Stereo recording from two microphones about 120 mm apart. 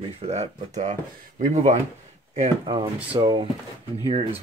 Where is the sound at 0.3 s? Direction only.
80° right.